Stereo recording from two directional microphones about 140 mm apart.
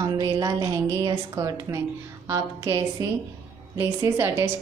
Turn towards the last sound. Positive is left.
turn(degrees=-20)  # may be behind; listen again after turning